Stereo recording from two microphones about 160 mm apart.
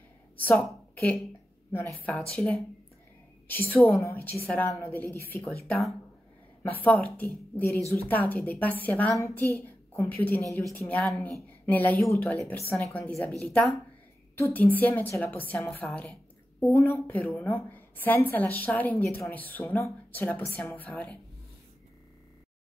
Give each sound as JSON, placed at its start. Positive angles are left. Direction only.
{"t": 0.5, "sound": "a woman's voice", "side_deg": 5}
{"t": 5.7, "sound": "speech", "side_deg": 0}
{"t": 6.6, "sound": "a woman's voice", "side_deg": 10}